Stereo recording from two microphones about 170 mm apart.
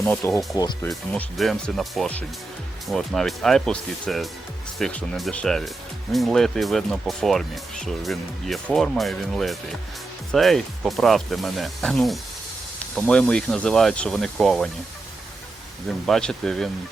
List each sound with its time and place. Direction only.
0.0 s speech: 15° left (ahead or behind)
0.9 s speech: 5° left (ahead or behind)
15.9 s speech: centre (ahead or behind)